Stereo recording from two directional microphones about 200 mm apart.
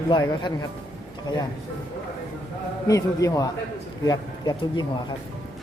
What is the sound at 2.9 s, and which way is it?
A man's voice, 15° left (ahead or behind).